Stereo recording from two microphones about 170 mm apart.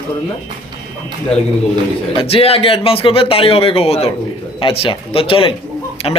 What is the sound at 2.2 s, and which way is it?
Speech, 35° left (ahead or behind).